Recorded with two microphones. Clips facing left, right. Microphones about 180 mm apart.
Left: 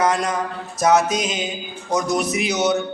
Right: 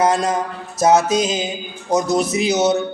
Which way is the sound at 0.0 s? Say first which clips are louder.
Right 3 dB; 25° right (ahead or behind).